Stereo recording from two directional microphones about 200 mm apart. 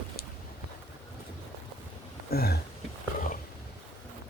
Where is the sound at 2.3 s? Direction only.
50° left (ahead or behind).